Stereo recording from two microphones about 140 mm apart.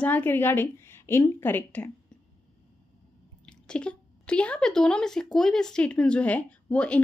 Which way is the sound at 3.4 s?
5° left (ahead or behind).